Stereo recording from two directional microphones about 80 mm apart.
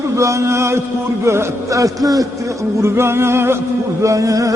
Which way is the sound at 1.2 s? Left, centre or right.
Right.